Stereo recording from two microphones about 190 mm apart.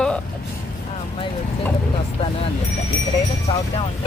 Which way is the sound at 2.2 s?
30° left (ahead or behind).